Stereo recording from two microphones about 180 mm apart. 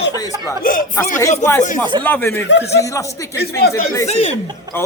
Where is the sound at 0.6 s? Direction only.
50° left (ahead or behind).